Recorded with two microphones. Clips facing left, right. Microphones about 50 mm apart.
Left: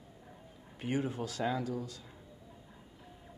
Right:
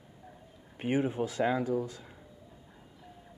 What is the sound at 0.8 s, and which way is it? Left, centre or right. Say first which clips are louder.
Speech: right 5 dB; right.